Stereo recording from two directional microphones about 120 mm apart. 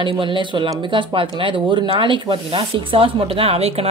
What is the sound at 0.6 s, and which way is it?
A woman's voice, 45° right (ahead or behind).